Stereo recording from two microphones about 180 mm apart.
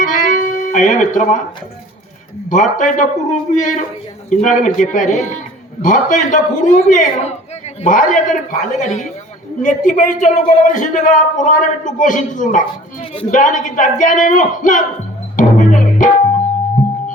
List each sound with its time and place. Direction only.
0.0 s music: 45° left (ahead or behind)
2.5 s a man's voice: 45° left (ahead or behind)
15.4 s music: 45° left (ahead or behind)